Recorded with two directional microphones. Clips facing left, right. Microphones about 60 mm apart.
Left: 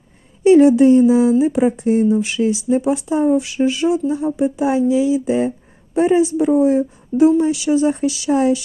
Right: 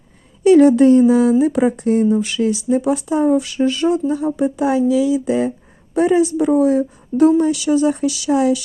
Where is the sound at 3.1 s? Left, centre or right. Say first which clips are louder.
Even; right.